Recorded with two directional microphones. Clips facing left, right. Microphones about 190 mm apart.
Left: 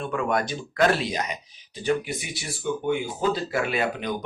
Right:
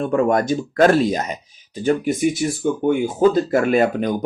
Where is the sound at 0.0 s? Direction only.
40° right (ahead or behind).